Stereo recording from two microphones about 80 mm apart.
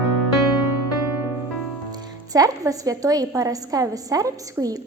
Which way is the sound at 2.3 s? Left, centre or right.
Right.